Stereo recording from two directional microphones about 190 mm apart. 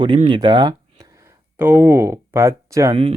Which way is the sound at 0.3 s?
25° right (ahead or behind).